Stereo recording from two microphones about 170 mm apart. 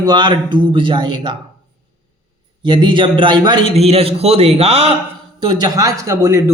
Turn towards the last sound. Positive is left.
turn(degrees=-15)  # may be behind; listen again after turning